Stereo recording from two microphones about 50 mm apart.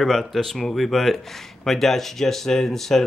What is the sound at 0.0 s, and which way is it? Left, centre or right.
Speech, centre.